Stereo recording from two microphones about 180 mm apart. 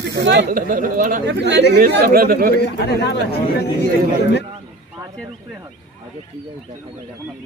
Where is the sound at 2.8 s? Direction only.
70° left (ahead or behind).